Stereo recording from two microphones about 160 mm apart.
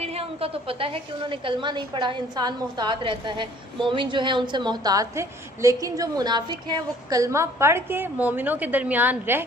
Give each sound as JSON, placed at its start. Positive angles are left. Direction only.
{"t": 0.0, "sound": "a woman's voice", "side_deg": -40}